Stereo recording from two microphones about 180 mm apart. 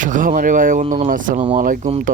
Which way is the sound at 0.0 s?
45° right (ahead or behind).